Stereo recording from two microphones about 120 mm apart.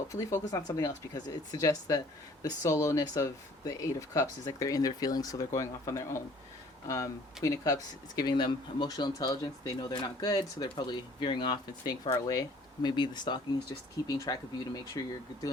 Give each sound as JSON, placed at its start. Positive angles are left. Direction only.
{"t": 0.1, "sound": "speech", "side_deg": 25}
{"t": 12.1, "sound": "speech", "side_deg": 30}